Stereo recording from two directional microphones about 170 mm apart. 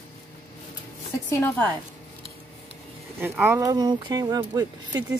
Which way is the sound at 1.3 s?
10° left (ahead or behind).